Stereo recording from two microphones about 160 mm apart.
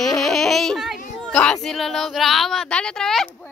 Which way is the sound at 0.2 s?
Centre (ahead or behind).